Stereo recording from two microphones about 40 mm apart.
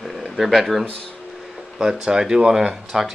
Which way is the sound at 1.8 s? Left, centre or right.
Centre.